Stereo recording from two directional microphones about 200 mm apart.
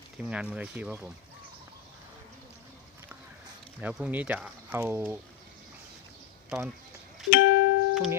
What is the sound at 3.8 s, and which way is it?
Speech, 5° right (ahead or behind).